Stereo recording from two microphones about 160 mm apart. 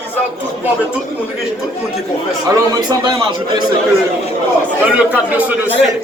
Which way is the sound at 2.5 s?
25° right (ahead or behind).